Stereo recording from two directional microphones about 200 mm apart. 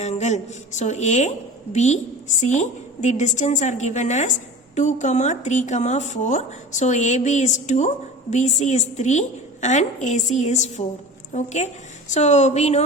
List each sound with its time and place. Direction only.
0.0 s a woman's voice: 35° left (ahead or behind)